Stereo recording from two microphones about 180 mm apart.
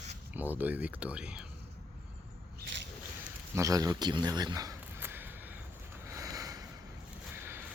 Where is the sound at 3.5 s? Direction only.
20° right (ahead or behind).